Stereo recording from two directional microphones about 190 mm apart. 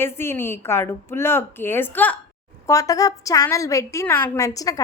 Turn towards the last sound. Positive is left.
turn(degrees=20)  # may be behind; listen again after turning